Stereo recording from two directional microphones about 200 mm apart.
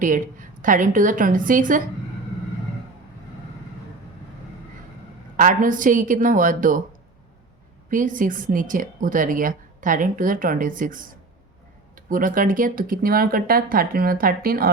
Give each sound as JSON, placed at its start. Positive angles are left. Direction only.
{"t": 0.0, "sound": "a woman's voice", "side_deg": -40}
{"t": 5.4, "sound": "a woman's voice", "side_deg": -40}
{"t": 7.9, "sound": "speech", "side_deg": -40}